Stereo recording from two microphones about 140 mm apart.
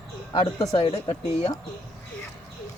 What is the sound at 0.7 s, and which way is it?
Speech, 45° left (ahead or behind).